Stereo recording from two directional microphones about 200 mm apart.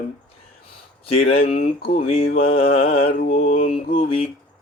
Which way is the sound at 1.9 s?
30° left (ahead or behind).